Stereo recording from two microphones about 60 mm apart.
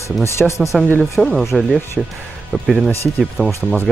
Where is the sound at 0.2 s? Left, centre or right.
Left.